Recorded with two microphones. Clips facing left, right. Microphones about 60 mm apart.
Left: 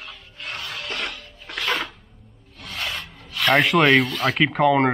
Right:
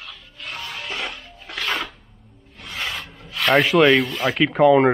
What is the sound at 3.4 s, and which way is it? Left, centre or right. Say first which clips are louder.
Speech: right 2 dB; centre.